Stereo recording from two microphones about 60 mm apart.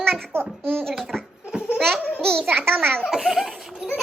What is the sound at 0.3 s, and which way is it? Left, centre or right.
Speech, right.